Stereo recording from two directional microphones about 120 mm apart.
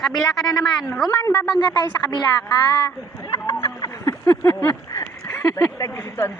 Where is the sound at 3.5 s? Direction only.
25° left (ahead or behind).